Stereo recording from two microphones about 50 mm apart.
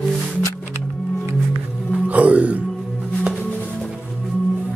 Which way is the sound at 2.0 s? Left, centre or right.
Right.